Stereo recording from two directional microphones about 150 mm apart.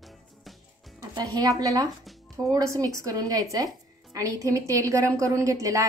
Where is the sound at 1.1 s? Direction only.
25° right (ahead or behind).